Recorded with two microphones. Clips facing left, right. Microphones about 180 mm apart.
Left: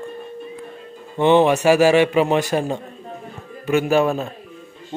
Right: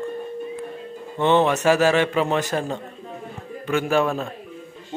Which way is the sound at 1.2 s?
15° left (ahead or behind).